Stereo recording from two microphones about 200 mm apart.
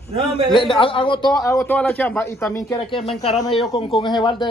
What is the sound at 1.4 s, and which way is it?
A man's voice, 15° left (ahead or behind).